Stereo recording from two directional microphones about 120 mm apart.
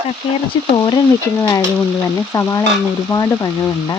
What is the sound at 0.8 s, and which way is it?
Speech, 35° left (ahead or behind).